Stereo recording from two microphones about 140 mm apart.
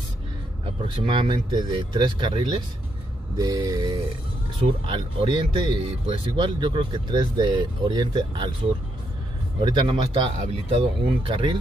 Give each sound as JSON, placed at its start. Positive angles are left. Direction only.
{"t": 0.7, "sound": "speech", "side_deg": -35}
{"t": 3.3, "sound": "mantra", "side_deg": -30}
{"t": 4.6, "sound": "speech", "side_deg": -40}
{"t": 9.6, "sound": "speech", "side_deg": -35}